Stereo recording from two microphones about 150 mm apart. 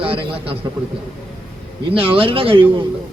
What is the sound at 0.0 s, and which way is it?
Speech, 40° right (ahead or behind).